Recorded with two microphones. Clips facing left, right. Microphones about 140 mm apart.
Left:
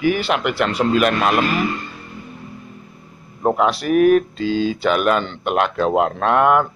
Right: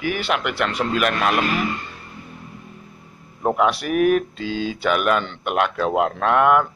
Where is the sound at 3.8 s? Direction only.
5° right (ahead or behind).